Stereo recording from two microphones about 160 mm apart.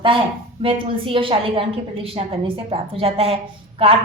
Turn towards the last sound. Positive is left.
turn(degrees=-35)  # may be behind; listen again after turning